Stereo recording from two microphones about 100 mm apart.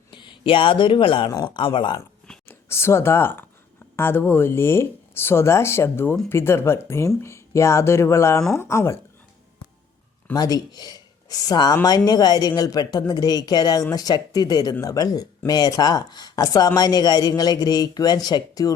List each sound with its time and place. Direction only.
0.1 s speech: 55° left (ahead or behind)
2.5 s speech: 25° left (ahead or behind)
10.3 s speech: 40° left (ahead or behind)